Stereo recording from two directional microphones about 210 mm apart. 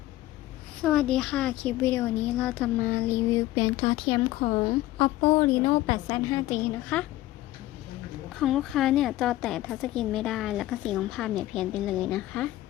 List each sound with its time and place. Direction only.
0.8 s a woman's voice: 5° left (ahead or behind)
3.5 s a woman's voice: 20° left (ahead or behind)
6.9 s speech: 5° left (ahead or behind)
8.3 s a woman's voice: centre (ahead or behind)